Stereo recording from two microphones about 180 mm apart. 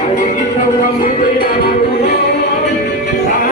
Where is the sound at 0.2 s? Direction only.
45° left (ahead or behind).